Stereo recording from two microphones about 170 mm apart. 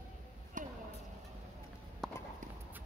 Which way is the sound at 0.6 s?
50° right (ahead or behind).